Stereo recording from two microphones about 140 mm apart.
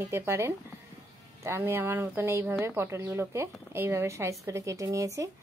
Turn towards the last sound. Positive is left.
turn(degrees=-25)  # may be behind; listen again after turning